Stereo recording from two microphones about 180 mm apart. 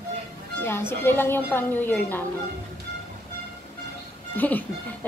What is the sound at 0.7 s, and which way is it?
Speech, 15° left (ahead or behind).